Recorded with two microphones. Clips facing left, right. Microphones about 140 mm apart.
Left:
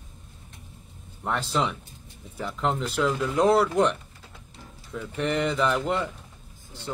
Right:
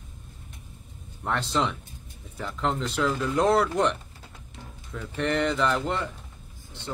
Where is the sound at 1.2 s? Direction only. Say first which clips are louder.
Even; 10° left (ahead or behind).